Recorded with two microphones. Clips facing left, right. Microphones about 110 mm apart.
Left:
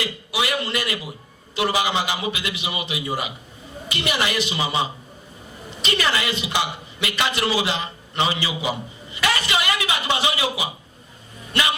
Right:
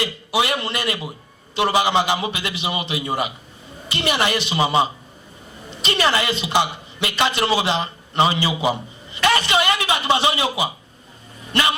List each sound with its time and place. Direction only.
0.0 s a man's voice: 30° right (ahead or behind)
5.8 s a man's voice: 35° right (ahead or behind)